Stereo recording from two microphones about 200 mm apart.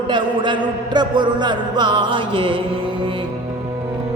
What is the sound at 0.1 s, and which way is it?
Music, 25° right (ahead or behind).